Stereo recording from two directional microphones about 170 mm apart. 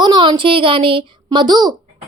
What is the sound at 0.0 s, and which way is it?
A child's voice, 25° right (ahead or behind).